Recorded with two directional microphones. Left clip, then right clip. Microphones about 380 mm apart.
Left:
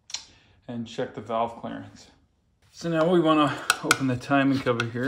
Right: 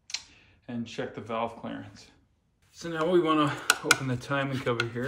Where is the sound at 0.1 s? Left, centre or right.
Centre.